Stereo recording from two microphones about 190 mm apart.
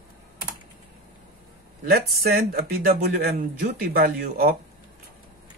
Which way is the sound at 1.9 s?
55° right (ahead or behind).